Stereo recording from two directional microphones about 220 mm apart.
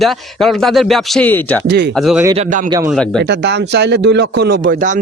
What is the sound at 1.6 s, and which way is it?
Speech, 50° right (ahead or behind).